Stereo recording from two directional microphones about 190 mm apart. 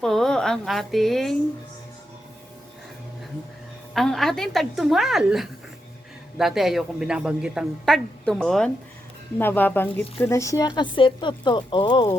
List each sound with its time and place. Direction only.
0.0 s a woman's voice: 5° left (ahead or behind)
3.9 s a woman's voice: centre (ahead or behind); by 12.0 s 25° left (ahead or behind)